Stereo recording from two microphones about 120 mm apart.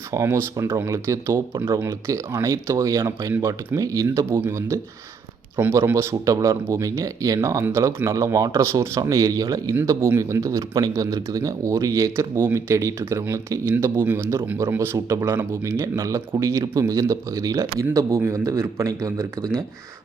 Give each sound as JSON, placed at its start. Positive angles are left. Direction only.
{"t": 0.1, "sound": "speech", "side_deg": -20}